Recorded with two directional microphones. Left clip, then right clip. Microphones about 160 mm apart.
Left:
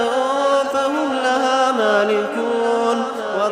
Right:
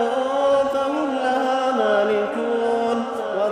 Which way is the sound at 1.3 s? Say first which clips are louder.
Left 4 dB; 15° left (ahead or behind).